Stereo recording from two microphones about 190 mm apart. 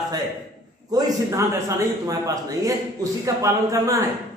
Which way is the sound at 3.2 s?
15° right (ahead or behind).